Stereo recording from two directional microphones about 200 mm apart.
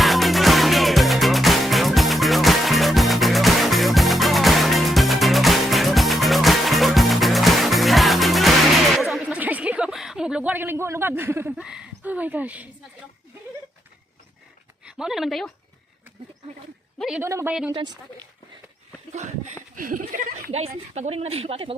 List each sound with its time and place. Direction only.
0.0 s music: centre (ahead or behind)
14.8 s speech: 5° right (ahead or behind)
17.0 s speech: 5° right (ahead or behind)
17.2 s speech: 15° right (ahead or behind)
19.1 s speech: 35° right (ahead or behind)